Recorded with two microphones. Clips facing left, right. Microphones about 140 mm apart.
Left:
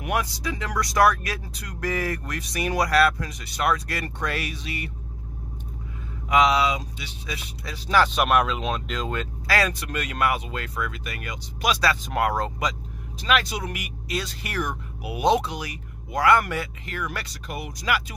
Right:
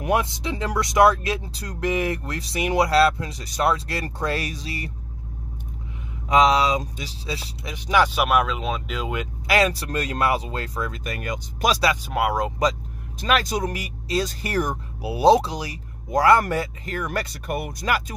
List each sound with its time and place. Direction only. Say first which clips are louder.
0.0 s speech: right 4 dB; 25° right (ahead or behind)
1.9 s speech: right 3 dB; 20° right (ahead or behind); by 4.9 s 35° right (ahead or behind)
6.2 s speech: right 2 dB; 35° right (ahead or behind)
7.6 s speech: right 1 dB; 20° right (ahead or behind)
9.7 s speech: right 4 dB; 35° right (ahead or behind)
12.0 s speech: right 1 dB; 10° right (ahead or behind)
13.2 s speech: right 2 dB; 40° right (ahead or behind)